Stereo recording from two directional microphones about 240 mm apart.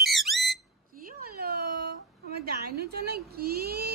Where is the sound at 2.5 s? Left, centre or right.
Right.